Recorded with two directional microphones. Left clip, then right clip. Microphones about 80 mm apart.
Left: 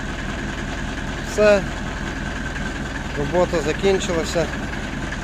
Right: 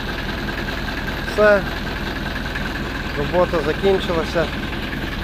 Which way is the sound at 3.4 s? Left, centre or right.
Left.